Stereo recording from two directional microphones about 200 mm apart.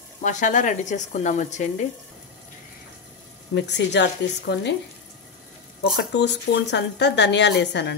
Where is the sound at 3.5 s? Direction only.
60° left (ahead or behind).